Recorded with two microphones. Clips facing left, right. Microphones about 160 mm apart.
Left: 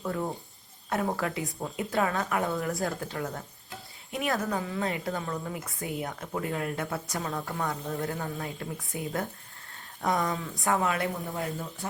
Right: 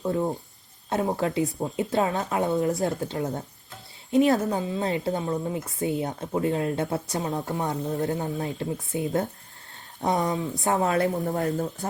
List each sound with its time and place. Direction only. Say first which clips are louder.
0.0 s a woman's voice: right 6 dB; 20° right (ahead or behind)
10.8 s speech: right 6 dB; 35° right (ahead or behind)